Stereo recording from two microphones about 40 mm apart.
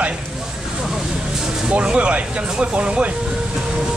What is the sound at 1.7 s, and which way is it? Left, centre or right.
Speech, right.